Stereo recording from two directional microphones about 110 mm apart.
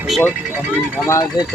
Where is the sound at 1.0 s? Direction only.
30° left (ahead or behind).